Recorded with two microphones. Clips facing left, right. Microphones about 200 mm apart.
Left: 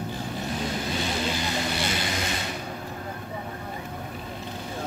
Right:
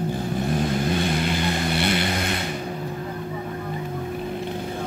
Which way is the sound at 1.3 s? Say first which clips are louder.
Right 4 dB; 60° right (ahead or behind).